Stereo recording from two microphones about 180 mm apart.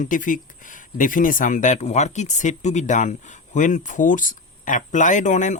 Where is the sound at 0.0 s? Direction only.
45° left (ahead or behind).